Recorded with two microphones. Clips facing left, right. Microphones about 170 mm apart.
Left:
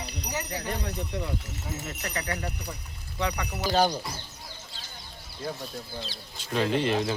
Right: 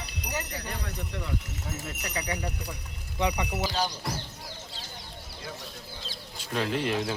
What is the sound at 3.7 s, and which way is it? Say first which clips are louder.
Speech: left 12 dB; 50° left (ahead or behind).